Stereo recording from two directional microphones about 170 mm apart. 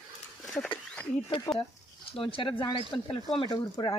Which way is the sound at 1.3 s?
30° left (ahead or behind).